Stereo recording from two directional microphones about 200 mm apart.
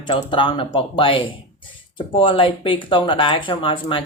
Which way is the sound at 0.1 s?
25° left (ahead or behind).